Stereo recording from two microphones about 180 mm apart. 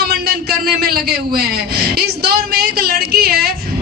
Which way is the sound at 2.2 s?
60° right (ahead or behind).